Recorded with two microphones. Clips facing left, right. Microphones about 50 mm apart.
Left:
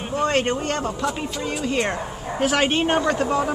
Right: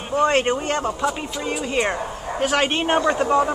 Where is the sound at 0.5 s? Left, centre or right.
Centre.